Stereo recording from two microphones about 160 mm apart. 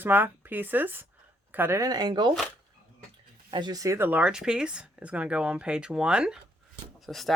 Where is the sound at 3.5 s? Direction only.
25° right (ahead or behind).